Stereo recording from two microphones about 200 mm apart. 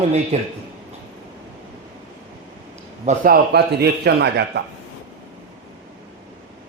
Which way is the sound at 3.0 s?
45° right (ahead or behind).